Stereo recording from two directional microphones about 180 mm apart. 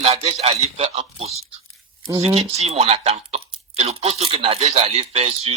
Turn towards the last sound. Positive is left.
turn(degrees=-35)  # may be behind; listen again after turning